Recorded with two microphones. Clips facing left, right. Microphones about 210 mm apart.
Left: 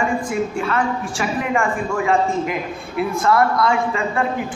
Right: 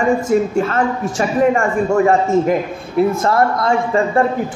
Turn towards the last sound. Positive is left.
turn(degrees=-40)  # may be behind; listen again after turning